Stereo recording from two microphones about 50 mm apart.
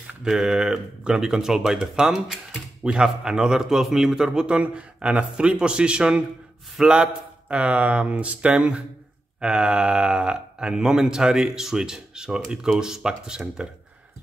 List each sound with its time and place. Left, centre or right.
0.2 s speech: centre